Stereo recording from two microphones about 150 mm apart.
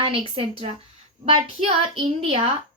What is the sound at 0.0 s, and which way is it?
A woman's voice, 35° right (ahead or behind).